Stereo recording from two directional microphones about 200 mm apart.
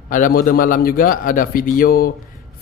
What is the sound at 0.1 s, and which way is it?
A man's voice, 45° left (ahead or behind).